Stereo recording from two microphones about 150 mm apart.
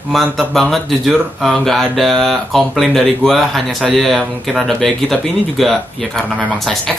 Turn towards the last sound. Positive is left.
turn(degrees=0)  # may be behind; listen again after turning